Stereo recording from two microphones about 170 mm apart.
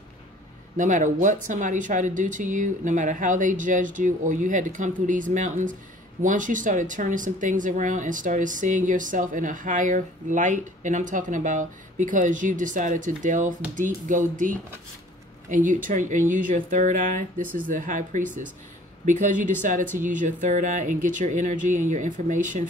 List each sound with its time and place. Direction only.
0.7 s speech: 50° right (ahead or behind)